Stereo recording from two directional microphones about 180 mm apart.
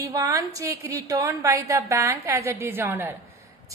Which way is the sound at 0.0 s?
20° right (ahead or behind).